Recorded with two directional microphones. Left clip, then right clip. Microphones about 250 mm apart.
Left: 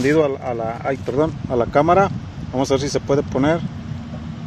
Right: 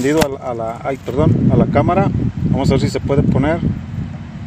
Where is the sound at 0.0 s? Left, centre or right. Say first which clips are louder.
Right 1 dB; centre.